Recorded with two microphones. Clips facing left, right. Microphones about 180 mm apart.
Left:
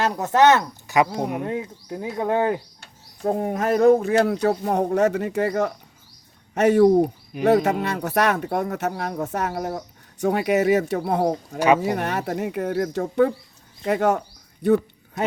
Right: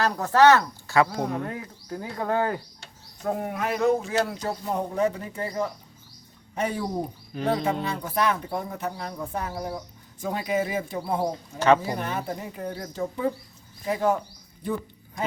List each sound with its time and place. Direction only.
0.0 s speech: 20° left (ahead or behind)
3.2 s speech: 30° left (ahead or behind); by 14.2 s 70° left (ahead or behind)
14.6 s a sound: 70° left (ahead or behind)